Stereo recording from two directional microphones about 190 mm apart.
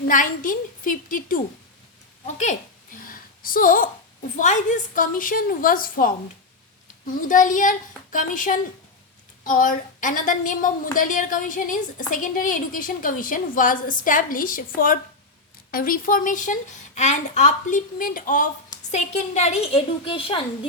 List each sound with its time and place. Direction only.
0.1 s a woman's voice: 45° left (ahead or behind)
7.2 s a woman's voice: 45° left (ahead or behind)
15.7 s a woman's voice: 50° left (ahead or behind); by 20.7 s 25° left (ahead or behind)